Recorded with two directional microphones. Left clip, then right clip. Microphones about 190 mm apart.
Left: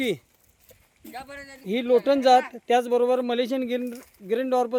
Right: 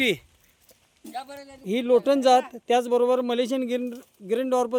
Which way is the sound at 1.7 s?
5° right (ahead or behind).